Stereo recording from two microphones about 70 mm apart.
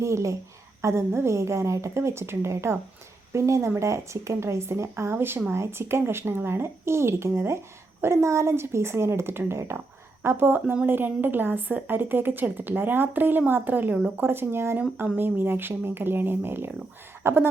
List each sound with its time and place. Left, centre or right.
0.0 s a woman's voice: right